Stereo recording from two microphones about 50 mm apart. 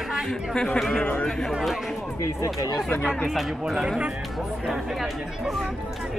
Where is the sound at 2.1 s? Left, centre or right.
Left.